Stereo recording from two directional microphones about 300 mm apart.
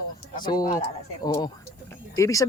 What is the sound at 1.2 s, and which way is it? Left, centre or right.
Speech, centre.